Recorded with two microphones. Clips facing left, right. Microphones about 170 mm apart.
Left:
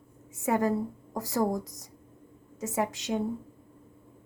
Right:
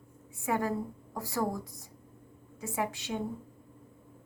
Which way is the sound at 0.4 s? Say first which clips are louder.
Left 5 dB; 40° left (ahead or behind).